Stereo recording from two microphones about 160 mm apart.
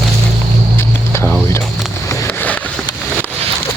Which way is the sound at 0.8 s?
15° left (ahead or behind).